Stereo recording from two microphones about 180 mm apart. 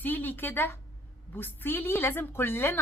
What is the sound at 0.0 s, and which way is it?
A woman's voice, 10° left (ahead or behind).